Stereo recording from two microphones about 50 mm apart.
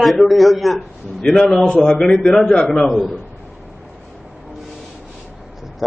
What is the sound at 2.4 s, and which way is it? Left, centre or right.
Speech, centre.